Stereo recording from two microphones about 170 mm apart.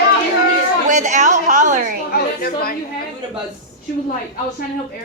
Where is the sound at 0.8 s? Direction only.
45° right (ahead or behind).